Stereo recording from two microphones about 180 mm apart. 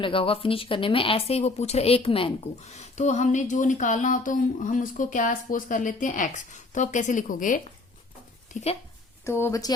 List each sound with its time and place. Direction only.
0.0 s speech: 30° left (ahead or behind); by 8.7 s 45° left (ahead or behind)
9.4 s a woman's voice: 20° left (ahead or behind)